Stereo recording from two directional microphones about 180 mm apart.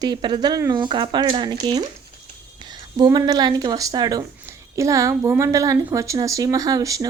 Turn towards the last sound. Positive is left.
turn(degrees=-20)  # may be behind; listen again after turning